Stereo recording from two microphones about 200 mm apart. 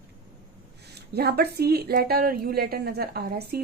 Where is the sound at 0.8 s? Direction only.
55° right (ahead or behind).